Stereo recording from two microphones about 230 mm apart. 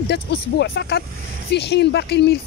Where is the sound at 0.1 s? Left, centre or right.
Left.